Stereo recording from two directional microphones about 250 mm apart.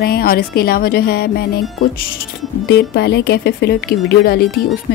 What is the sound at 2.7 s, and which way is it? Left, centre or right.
Speech, left.